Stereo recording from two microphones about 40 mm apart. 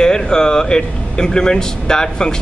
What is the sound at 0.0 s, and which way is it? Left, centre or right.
A man's voice, centre.